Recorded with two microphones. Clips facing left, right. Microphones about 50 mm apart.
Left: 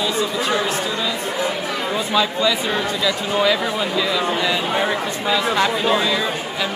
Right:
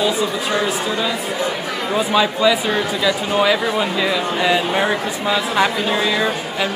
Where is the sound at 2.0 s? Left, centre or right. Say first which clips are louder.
Right 4 dB; centre.